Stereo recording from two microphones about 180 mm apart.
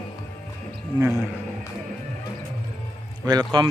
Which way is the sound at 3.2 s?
25° right (ahead or behind).